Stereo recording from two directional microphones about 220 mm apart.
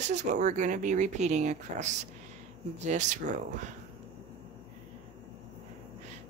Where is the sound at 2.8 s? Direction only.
35° right (ahead or behind).